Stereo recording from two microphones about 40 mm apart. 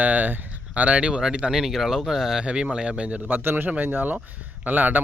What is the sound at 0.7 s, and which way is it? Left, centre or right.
Speech, right.